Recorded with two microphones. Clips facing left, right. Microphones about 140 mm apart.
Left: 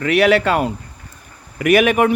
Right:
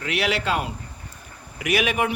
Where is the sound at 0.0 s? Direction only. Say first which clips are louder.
Left 11 dB; 55° left (ahead or behind).